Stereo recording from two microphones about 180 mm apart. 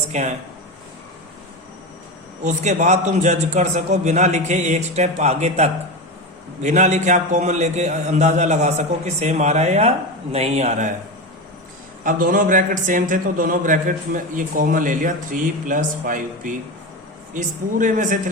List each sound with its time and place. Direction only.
0.1 s speech: 40° right (ahead or behind)
2.4 s a man's voice: 40° right (ahead or behind)
12.0 s a man's voice: 50° right (ahead or behind)